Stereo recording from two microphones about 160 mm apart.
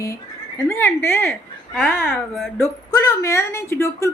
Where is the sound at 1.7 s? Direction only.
Centre (ahead or behind).